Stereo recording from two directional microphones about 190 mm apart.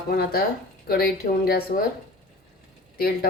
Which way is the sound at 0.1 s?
55° left (ahead or behind).